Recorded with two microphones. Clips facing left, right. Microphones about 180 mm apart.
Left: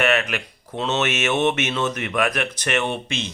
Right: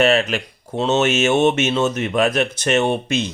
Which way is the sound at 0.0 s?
30° right (ahead or behind).